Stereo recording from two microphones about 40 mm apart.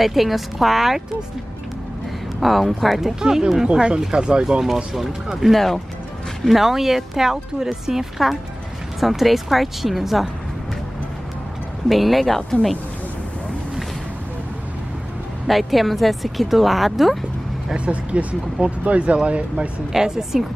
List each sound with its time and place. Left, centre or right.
0.0 s speech: centre
2.4 s speech: centre
3.2 s speech: centre
3.6 s speech: right
4.9 s speech: centre
11.9 s speech: centre
15.4 s speech: centre
17.7 s speech: right
19.9 s speech: centre